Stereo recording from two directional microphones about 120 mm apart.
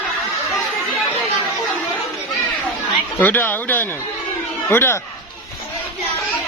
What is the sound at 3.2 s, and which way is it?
Speech, 15° left (ahead or behind).